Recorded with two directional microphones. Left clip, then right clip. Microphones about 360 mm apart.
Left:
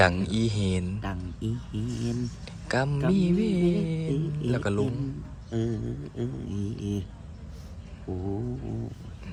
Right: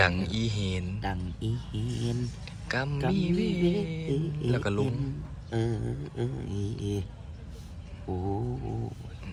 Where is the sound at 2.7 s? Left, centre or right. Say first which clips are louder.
Left 3 dB; centre.